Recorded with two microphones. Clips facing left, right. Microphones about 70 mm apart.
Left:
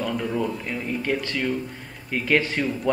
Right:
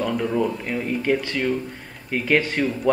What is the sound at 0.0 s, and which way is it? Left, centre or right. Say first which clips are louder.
Speech: right 3 dB; centre.